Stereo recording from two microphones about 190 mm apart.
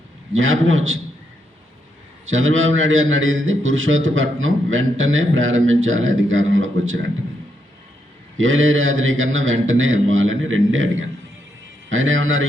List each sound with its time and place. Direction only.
0.3 s a man's voice: 90° right
2.2 s a man's voice: 90° right
8.4 s a man's voice: 90° right